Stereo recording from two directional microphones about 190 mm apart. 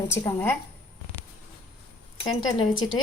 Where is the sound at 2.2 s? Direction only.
25° left (ahead or behind).